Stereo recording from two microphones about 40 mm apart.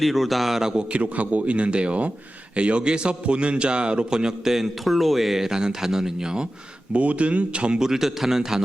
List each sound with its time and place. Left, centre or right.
0.0 s a man's voice: centre
0.7 s a man's voice: right
1.0 s a man's voice: right; by 6.5 s centre
6.9 s speech: right
7.8 s a man's voice: centre